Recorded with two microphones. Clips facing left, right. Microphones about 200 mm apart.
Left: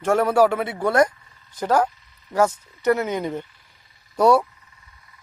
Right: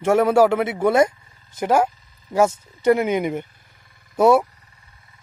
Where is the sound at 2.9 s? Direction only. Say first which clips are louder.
Right 3 dB; 15° right (ahead or behind).